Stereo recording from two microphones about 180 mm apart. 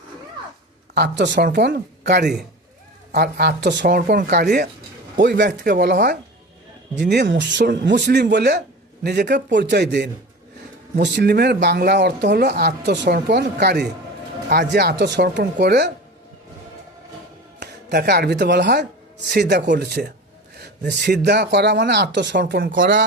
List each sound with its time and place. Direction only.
0.9 s speech: 70° right (ahead or behind)
5.1 s speech: 70° right (ahead or behind)
17.6 s speech: 70° right (ahead or behind)